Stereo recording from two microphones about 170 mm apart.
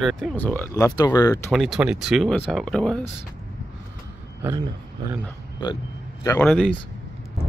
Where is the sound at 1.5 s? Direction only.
Centre (ahead or behind).